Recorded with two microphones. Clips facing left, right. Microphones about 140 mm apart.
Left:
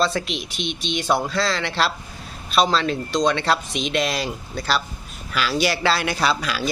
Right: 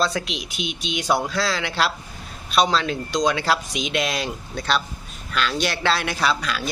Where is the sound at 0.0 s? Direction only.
Centre (ahead or behind).